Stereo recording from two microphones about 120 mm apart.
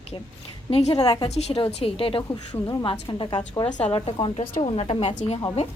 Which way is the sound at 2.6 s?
30° left (ahead or behind).